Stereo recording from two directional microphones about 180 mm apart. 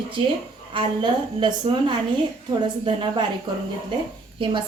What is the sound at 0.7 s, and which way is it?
A woman's voice, 25° right (ahead or behind).